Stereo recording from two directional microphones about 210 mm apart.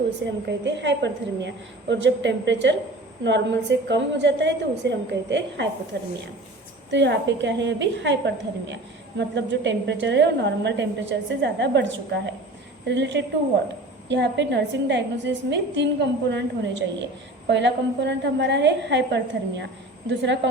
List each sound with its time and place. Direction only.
0.4 s a woman's voice: 55° right (ahead or behind)